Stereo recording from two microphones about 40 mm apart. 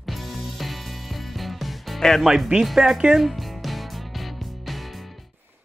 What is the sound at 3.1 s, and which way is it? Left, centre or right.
Music, centre.